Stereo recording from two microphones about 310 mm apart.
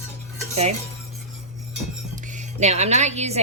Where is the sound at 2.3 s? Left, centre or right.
Right.